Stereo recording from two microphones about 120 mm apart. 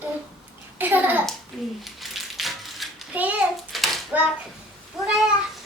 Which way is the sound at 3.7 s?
Centre (ahead or behind).